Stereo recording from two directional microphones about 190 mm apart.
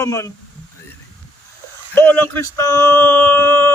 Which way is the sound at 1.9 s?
10° left (ahead or behind).